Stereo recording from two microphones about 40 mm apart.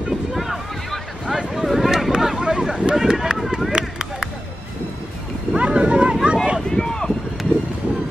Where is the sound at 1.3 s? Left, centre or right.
Centre.